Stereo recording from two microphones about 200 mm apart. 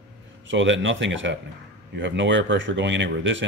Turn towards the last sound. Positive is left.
turn(degrees=-70)  # may be behind; listen again after turning